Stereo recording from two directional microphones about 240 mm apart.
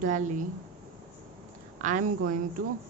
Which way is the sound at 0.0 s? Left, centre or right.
Right.